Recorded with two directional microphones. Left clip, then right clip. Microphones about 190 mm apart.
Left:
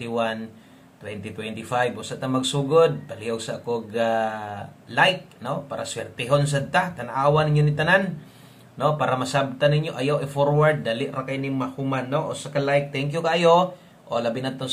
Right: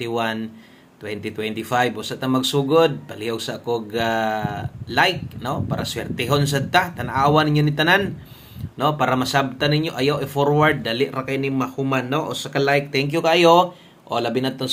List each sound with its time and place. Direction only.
0.0 s speech: 35° right (ahead or behind)